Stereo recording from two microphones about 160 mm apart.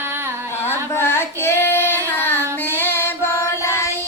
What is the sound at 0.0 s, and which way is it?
Carnatic music, 15° right (ahead or behind).